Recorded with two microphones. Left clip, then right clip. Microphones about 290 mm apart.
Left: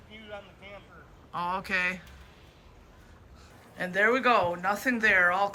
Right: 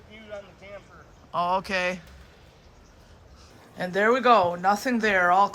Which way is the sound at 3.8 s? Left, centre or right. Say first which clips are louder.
Right 3 dB; centre.